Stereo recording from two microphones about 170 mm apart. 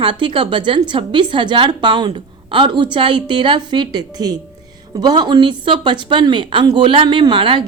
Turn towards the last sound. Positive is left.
turn(degrees=-30)  # may be behind; listen again after turning